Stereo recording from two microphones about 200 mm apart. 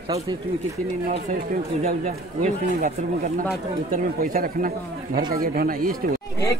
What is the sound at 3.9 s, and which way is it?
Speech, 45° right (ahead or behind).